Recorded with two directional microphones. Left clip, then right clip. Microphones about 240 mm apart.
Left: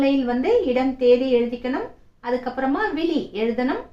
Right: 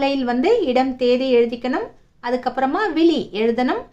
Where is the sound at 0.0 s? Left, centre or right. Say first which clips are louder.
Right 2 dB; right.